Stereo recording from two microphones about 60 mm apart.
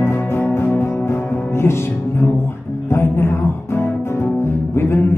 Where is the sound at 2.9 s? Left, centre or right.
Left.